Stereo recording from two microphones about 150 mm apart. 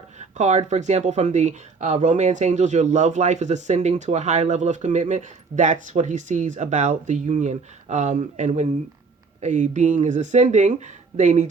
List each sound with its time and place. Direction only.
0.2 s speech: 50° right (ahead or behind)